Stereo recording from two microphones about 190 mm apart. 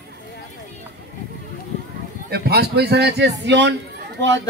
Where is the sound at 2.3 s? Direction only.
55° right (ahead or behind); by 4.4 s 70° right (ahead or behind).